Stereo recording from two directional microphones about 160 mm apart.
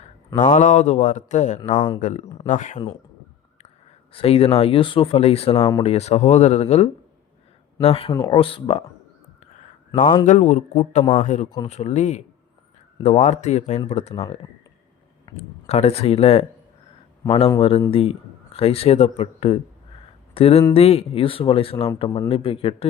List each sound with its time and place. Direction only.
0.5 s speech: 50° left (ahead or behind)
1.7 s speech: 30° left (ahead or behind)
2.0 s speech: 50° left (ahead or behind)
4.1 s speech: 35° left (ahead or behind)
8.1 s speech: 20° left (ahead or behind)
8.4 s speech: 35° left (ahead or behind)
10.2 s speech: 50° left (ahead or behind)
11.4 s speech: 25° left (ahead or behind)
11.7 s speech: 45° left (ahead or behind)
15.4 s speech: 40° left (ahead or behind)
17.6 s a man's voice: 40° left (ahead or behind)